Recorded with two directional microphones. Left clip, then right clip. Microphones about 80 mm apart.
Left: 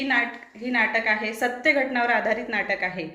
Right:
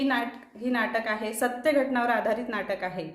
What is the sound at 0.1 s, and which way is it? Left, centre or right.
A woman's voice, right.